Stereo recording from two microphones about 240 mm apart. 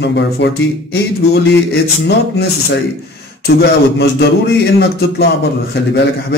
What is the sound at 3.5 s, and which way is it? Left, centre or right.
A man's voice, left.